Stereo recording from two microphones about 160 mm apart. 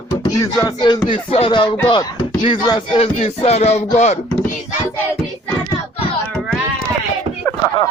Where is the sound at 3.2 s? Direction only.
40° left (ahead or behind).